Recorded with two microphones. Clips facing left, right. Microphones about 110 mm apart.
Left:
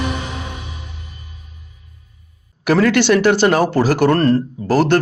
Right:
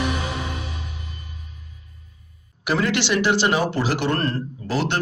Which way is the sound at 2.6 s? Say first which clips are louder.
Left 8 dB; 50° left (ahead or behind).